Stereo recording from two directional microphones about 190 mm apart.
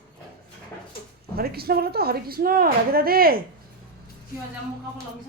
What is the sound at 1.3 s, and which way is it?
A woman's voice, 55° right (ahead or behind).